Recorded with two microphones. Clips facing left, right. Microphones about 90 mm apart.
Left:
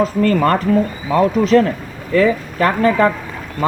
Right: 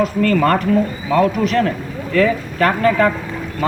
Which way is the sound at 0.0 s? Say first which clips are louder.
Left 1 dB; 30° left (ahead or behind).